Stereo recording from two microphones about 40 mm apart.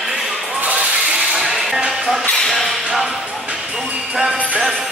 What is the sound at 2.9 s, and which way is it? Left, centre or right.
Music, centre.